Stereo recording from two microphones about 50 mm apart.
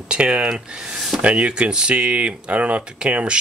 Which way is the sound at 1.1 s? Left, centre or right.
Right.